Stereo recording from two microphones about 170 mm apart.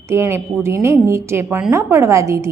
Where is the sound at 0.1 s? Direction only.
15° right (ahead or behind).